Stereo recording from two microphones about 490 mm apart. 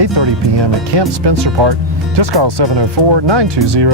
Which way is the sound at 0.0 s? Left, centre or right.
Right.